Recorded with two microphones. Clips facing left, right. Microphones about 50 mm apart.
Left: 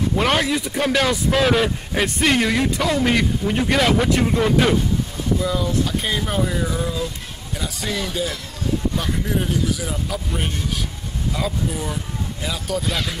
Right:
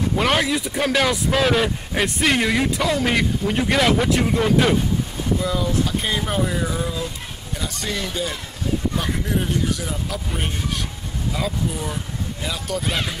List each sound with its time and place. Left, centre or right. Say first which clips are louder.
0.1 s speech: even; centre